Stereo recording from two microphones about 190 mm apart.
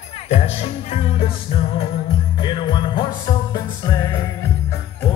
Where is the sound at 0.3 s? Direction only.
35° left (ahead or behind).